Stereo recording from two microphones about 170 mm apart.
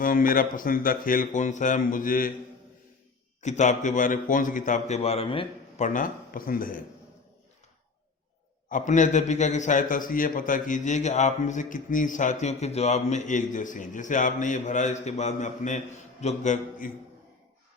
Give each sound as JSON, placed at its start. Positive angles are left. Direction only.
{"t": 0.0, "sound": "a man's voice", "side_deg": 55}
{"t": 3.4, "sound": "a man's voice", "side_deg": 45}
{"t": 5.8, "sound": "a man's voice", "side_deg": 50}
{"t": 8.7, "sound": "a man's voice", "side_deg": 45}